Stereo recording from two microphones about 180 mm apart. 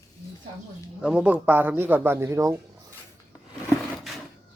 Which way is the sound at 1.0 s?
5° right (ahead or behind).